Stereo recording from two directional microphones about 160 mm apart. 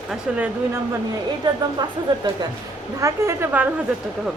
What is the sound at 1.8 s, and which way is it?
Speech, 25° right (ahead or behind).